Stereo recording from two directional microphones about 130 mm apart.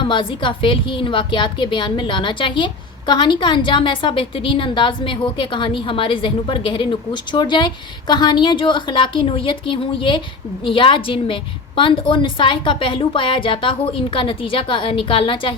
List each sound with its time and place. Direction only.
0.1 s a woman's voice: 40° left (ahead or behind)